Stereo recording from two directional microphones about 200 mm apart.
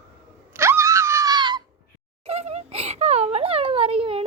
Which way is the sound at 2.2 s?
30° right (ahead or behind).